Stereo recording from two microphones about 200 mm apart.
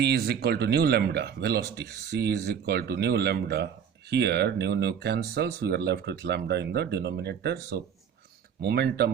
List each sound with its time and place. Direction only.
0.0 s speech: 55° right (ahead or behind)